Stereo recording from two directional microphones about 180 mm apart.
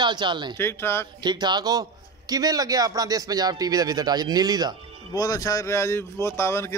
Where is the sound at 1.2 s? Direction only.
25° right (ahead or behind).